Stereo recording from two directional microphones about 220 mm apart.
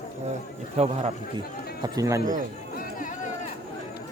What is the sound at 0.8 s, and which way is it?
Speech, 30° right (ahead or behind).